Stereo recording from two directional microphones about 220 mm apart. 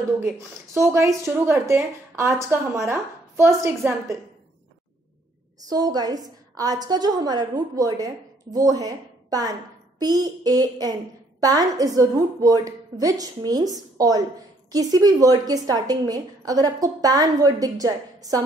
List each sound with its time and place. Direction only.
0.7 s a woman's voice: 15° right (ahead or behind)
5.7 s a woman's voice: 15° right (ahead or behind)